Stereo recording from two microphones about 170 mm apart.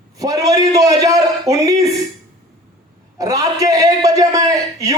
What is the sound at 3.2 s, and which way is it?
A man's voice, 20° right (ahead or behind).